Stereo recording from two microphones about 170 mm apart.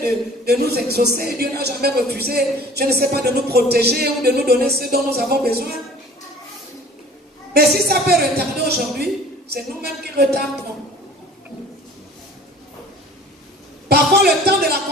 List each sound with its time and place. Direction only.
0.0 s a man's voice: 65° right (ahead or behind)
7.5 s speech: 70° right (ahead or behind)
13.8 s speech: 70° right (ahead or behind)